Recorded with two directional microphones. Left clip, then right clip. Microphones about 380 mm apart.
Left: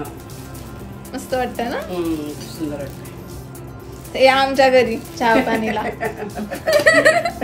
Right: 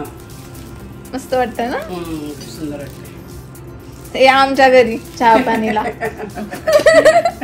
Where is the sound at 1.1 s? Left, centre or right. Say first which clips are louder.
Right 5 dB; centre.